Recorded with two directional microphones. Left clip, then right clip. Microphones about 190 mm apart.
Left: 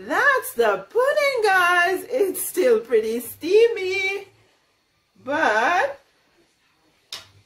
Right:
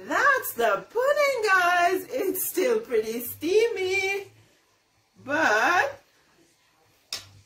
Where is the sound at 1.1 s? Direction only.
30° left (ahead or behind).